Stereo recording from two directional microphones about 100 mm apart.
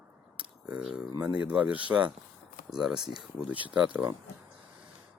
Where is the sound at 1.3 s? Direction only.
15° right (ahead or behind).